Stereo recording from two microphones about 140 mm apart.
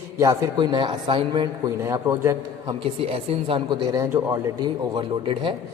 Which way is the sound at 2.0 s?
20° right (ahead or behind).